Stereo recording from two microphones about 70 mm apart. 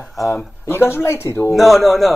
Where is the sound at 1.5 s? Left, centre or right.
Centre.